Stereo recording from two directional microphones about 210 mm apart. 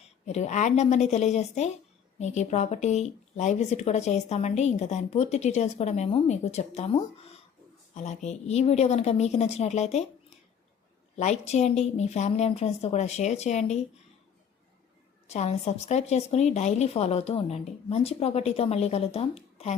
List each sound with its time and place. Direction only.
0.0 s speech: 30° left (ahead or behind)
15.3 s speech: 30° left (ahead or behind)